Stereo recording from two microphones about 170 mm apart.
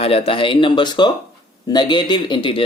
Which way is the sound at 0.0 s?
35° left (ahead or behind).